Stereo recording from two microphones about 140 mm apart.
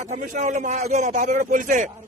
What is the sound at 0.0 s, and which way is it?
A man's voice, 55° right (ahead or behind).